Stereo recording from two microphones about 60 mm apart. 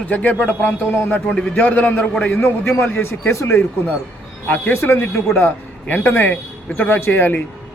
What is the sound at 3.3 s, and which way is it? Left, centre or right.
Speech, left.